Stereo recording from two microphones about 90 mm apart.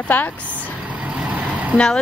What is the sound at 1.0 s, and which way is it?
Vehicle, 15° right (ahead or behind).